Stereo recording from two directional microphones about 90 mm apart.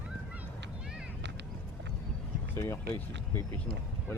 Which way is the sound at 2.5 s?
25° left (ahead or behind).